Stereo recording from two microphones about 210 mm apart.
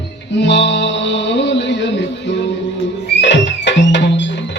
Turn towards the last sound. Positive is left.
turn(degrees=55)  # may be behind; listen again after turning